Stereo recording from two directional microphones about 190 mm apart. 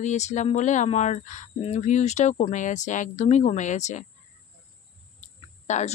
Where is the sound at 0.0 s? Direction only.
35° left (ahead or behind).